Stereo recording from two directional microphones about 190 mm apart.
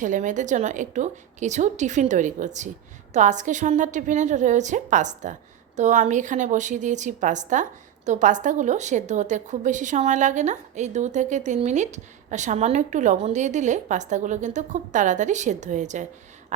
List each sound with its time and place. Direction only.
0.0 s a woman's voice: 40° right (ahead or behind)